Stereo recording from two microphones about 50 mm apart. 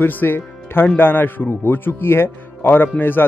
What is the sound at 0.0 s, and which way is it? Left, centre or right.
Speech, left.